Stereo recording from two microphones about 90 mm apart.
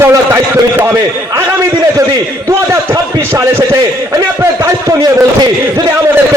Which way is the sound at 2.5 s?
35° right (ahead or behind).